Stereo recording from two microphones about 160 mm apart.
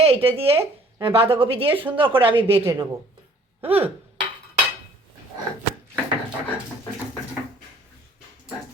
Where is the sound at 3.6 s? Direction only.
35° right (ahead or behind).